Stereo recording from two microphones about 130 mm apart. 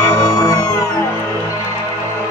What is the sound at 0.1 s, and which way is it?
Music, 30° left (ahead or behind).